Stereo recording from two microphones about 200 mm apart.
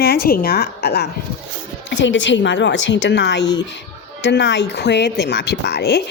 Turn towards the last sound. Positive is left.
turn(degrees=55)  # may be behind; listen again after turning